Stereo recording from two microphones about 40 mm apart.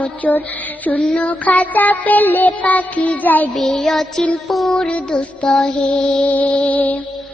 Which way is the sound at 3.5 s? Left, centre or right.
Centre.